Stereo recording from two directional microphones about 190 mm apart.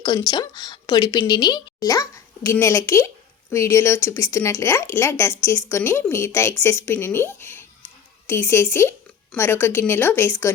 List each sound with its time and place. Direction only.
0.0 s speech: 20° left (ahead or behind)